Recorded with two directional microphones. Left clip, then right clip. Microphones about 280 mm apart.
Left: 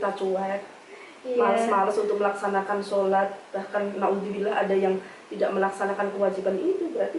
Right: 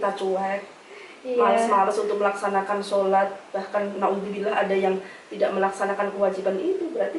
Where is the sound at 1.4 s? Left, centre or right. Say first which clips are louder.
Right 3 dB; centre.